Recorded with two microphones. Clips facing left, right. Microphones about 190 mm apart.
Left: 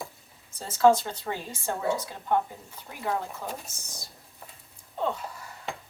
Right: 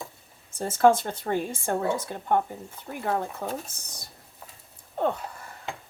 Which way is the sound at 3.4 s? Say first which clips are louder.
Right 4 dB; 55° right (ahead or behind).